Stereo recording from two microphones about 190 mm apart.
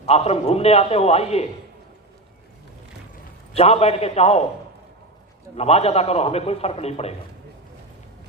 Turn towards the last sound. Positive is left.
turn(degrees=35)  # may be behind; listen again after turning